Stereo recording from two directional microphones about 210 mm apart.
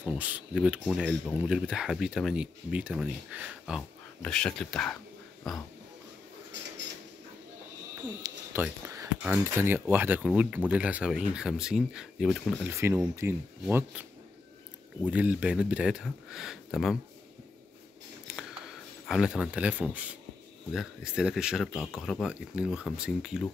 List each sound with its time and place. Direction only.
0.0 s speech: 5° right (ahead or behind)
6.5 s a sound: 60° right (ahead or behind)
8.5 s speech: 10° right (ahead or behind)
15.0 s speech: 5° right (ahead or behind)
19.0 s speech: 5° right (ahead or behind)